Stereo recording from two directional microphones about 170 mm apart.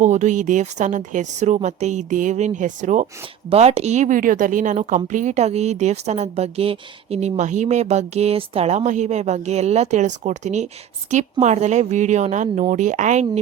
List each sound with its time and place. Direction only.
0.0 s a woman's voice: 45° right (ahead or behind)